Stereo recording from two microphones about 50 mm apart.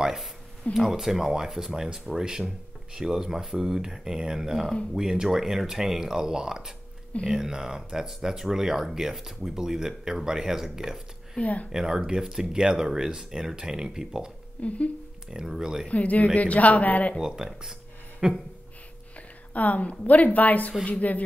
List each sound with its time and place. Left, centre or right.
0.0 s speech: centre
11.4 s speech: left
11.7 s speech: centre
14.6 s speech: left
15.3 s speech: centre
15.9 s a woman's voice: left
17.2 s speech: centre
18.2 s a sound: centre
19.5 s a woman's voice: left